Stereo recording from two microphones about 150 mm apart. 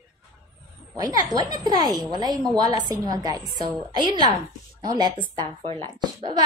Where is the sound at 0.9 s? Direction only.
25° right (ahead or behind).